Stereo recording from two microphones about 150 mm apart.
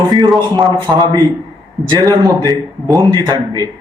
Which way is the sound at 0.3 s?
25° right (ahead or behind).